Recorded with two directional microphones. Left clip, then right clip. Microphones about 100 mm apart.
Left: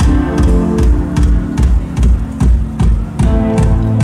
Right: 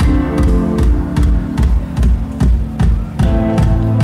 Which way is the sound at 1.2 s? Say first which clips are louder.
Left 1 dB; 20° right (ahead or behind).